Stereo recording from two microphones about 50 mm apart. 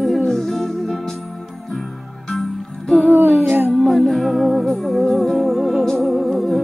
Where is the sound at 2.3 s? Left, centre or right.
Centre.